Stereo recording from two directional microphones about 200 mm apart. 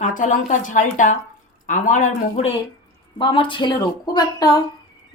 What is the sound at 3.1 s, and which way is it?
A woman's voice, 25° left (ahead or behind).